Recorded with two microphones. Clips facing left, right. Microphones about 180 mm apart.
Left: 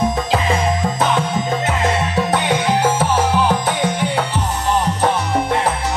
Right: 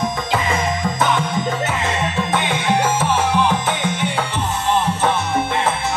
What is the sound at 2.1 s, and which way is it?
Music, 40° left (ahead or behind).